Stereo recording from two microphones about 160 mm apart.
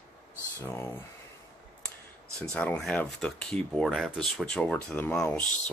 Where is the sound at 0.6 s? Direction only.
15° left (ahead or behind).